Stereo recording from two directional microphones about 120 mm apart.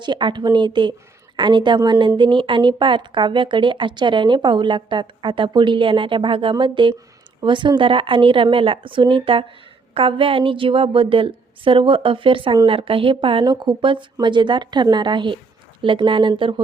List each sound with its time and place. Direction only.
0.0 s a woman's voice: 40° right (ahead or behind)